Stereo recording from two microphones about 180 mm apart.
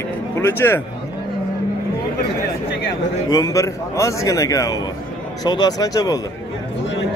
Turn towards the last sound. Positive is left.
turn(degrees=20)  # may be behind; listen again after turning